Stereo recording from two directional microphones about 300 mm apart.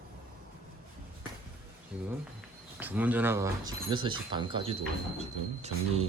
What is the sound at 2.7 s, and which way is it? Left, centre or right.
Speech, centre.